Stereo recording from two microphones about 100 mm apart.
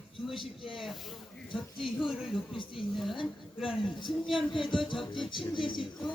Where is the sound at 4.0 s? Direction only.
50° left (ahead or behind).